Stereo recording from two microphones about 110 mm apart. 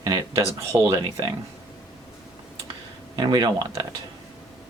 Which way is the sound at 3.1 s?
40° right (ahead or behind).